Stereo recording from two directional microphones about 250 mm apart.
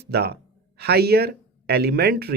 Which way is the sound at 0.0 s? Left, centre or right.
Right.